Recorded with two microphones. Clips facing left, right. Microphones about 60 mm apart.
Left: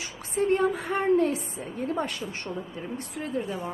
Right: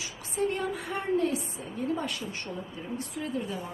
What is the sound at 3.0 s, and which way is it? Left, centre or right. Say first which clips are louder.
Speech: left 2 dB; left.